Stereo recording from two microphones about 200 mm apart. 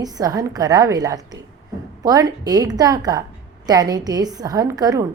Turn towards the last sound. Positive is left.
turn(degrees=-20)  # may be behind; listen again after turning